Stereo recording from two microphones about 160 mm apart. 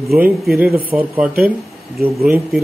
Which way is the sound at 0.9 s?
10° right (ahead or behind).